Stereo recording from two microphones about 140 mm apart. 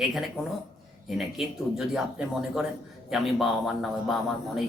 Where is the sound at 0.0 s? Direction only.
Centre (ahead or behind).